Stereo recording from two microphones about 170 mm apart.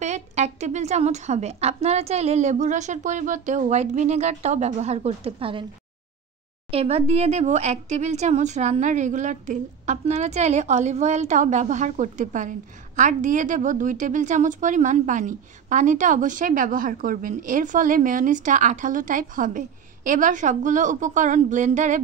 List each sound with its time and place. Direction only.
0.0 s a woman's voice: 40° right (ahead or behind)
6.7 s speech: 35° right (ahead or behind)